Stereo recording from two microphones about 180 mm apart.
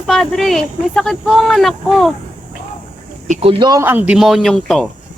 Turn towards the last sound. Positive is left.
turn(degrees=0)  # may be behind; listen again after turning